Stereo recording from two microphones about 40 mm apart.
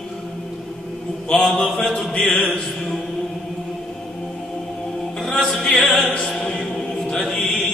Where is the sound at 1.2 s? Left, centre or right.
Left.